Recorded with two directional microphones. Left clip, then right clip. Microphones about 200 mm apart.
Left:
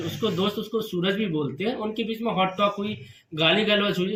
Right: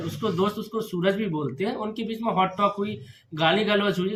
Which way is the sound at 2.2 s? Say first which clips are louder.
Right 1 dB; 10° right (ahead or behind).